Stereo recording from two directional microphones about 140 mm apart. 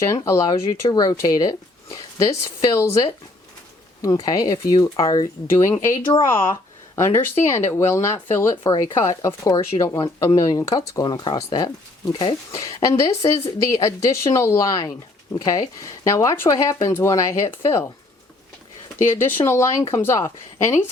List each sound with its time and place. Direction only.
0.0 s speech: 20° left (ahead or behind)
8.7 s speech: 35° left (ahead or behind)
9.0 s speech: 20° left (ahead or behind)
19.1 s speech: 20° left (ahead or behind)